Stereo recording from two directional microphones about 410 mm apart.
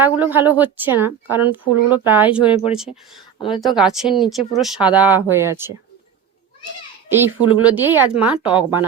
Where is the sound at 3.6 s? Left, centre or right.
Centre.